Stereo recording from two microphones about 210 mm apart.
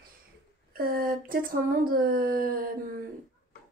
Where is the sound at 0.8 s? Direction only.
45° right (ahead or behind).